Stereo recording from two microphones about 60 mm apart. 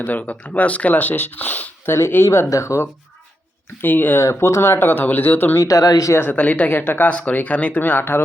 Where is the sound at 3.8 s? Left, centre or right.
Left.